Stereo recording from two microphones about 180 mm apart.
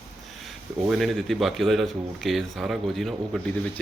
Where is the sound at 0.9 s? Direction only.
Centre (ahead or behind).